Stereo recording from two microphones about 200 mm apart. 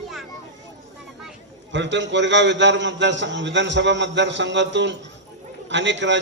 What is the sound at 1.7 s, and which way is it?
A man's voice, 65° right (ahead or behind).